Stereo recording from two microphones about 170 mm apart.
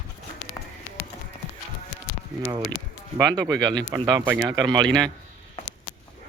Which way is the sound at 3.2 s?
20° right (ahead or behind).